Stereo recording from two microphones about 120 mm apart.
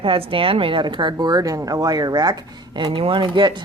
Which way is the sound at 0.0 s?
50° right (ahead or behind).